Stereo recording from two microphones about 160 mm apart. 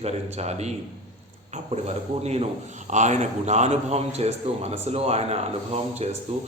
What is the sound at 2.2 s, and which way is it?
A man's voice, 40° right (ahead or behind).